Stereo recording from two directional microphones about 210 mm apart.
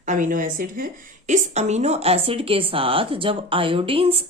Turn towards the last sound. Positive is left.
turn(degrees=-25)  # may be behind; listen again after turning